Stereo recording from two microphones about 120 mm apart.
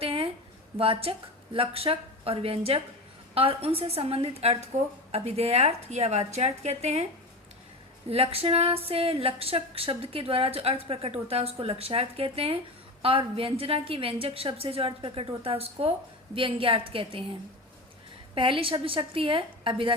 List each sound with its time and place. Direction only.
0.0 s a sound: 50° right (ahead or behind)
0.8 s a woman's voice: 50° right (ahead or behind)
8.1 s a woman's voice: 55° right (ahead or behind)
18.3 s a woman's voice: 45° right (ahead or behind)